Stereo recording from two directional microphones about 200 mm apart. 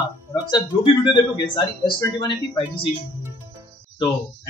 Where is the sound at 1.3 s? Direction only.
20° left (ahead or behind).